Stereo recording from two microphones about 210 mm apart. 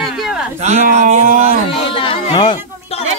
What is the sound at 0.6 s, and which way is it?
Speech, 35° right (ahead or behind).